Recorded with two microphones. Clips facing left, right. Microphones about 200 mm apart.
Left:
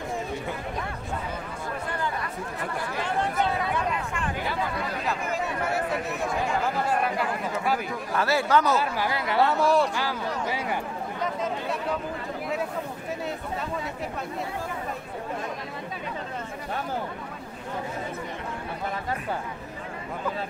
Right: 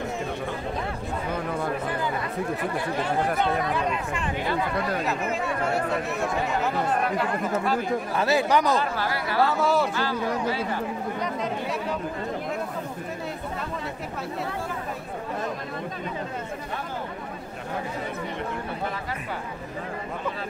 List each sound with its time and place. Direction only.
6.9 s speech: 10° left (ahead or behind)
8.2 s speech: 20° right (ahead or behind)
8.7 s speech: 15° left (ahead or behind)
9.4 s speech: centre (ahead or behind)
9.9 s speech: 15° left (ahead or behind)